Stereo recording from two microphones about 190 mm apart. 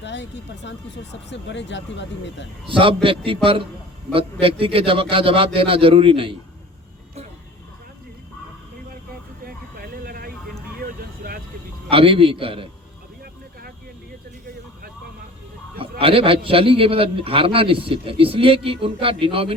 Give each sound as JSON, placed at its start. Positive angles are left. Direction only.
{"t": 0.0, "sound": "speech", "side_deg": 70}
{"t": 2.6, "sound": "a man's voice", "side_deg": -30}
{"t": 9.4, "sound": "vehicle", "side_deg": -50}
{"t": 11.9, "sound": "a man's voice", "side_deg": -30}
{"t": 15.8, "sound": "a man's voice", "side_deg": -30}